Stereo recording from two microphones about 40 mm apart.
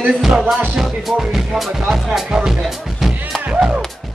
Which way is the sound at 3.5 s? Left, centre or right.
Right.